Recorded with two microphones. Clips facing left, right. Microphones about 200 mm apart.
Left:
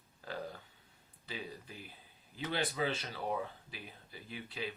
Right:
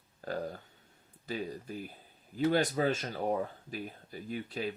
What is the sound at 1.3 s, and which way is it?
Speech, 45° right (ahead or behind).